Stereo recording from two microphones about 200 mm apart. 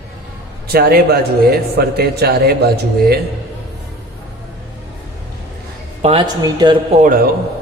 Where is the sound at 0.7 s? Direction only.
50° right (ahead or behind).